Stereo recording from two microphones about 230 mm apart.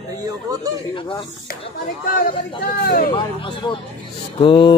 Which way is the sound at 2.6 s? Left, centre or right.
Left.